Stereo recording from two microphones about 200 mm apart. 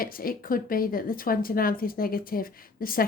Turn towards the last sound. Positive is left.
turn(degrees=45)  # may be behind; listen again after turning